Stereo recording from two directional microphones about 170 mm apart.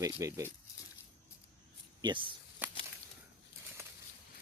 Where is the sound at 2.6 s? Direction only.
10° right (ahead or behind).